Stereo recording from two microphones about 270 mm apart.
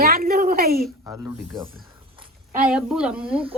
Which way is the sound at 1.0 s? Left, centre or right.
Centre.